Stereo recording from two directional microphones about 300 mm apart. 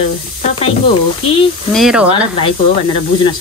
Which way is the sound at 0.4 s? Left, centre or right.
Centre.